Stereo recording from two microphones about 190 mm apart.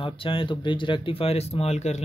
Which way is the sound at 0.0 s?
30° left (ahead or behind).